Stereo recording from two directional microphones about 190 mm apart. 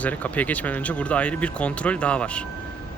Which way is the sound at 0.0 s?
10° left (ahead or behind).